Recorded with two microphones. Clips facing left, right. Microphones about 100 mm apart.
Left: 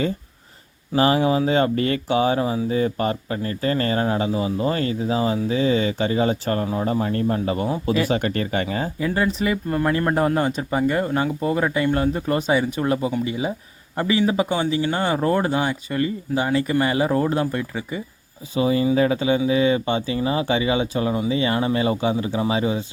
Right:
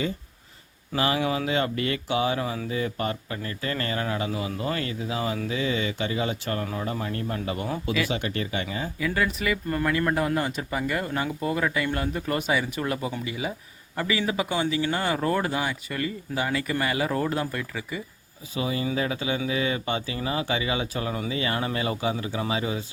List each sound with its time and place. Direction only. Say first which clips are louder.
0.9 s speech: left 7 dB; 35° left (ahead or behind)